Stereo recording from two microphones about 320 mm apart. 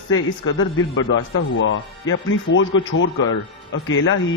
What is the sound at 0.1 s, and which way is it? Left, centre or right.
Speech, left.